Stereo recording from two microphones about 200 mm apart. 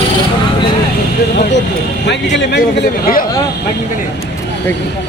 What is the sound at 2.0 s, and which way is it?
A man's voice, 60° left (ahead or behind).